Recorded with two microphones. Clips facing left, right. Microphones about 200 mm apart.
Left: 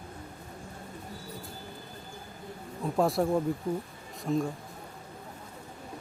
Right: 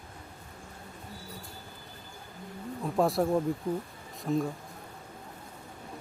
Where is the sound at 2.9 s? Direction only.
Centre (ahead or behind).